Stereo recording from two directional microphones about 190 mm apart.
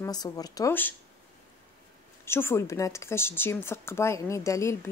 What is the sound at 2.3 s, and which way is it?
Speech, 15° left (ahead or behind).